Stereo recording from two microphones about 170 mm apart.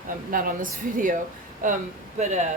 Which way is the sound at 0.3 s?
55° right (ahead or behind).